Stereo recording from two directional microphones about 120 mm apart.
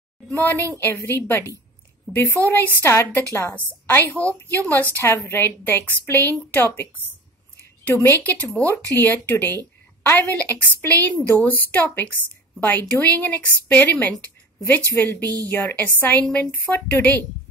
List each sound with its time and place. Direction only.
0.3 s a woman's voice: 15° left (ahead or behind)
15.4 s a woman's voice: 15° left (ahead or behind)